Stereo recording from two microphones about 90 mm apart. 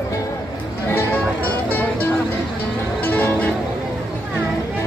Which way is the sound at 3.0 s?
20° left (ahead or behind).